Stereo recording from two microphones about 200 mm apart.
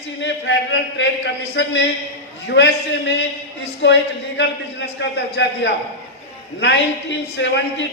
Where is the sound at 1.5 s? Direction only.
60° left (ahead or behind).